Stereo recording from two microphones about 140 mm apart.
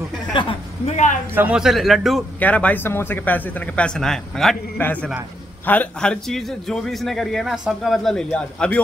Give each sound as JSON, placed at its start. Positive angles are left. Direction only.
{"t": 0.3, "sound": "a woman's voice", "side_deg": 35}
{"t": 0.8, "sound": "speech", "side_deg": 60}
{"t": 1.3, "sound": "a man's voice", "side_deg": -10}
{"t": 2.4, "sound": "a man's voice", "side_deg": 10}